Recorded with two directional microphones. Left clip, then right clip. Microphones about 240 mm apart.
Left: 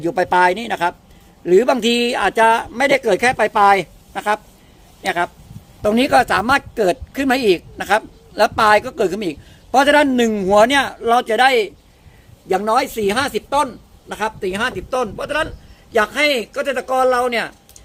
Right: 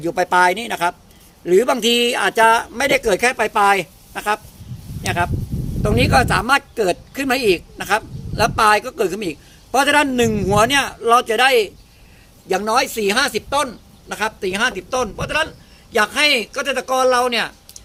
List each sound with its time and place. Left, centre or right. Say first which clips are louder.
0.0 s speech: left 1 dB; left